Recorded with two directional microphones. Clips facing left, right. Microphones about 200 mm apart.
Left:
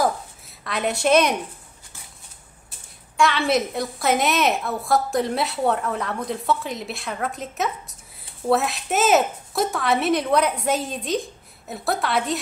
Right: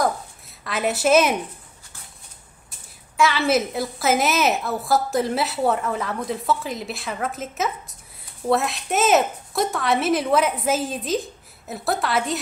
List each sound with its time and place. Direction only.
0.7 s a woman's voice: centre (ahead or behind)
3.2 s a woman's voice: centre (ahead or behind)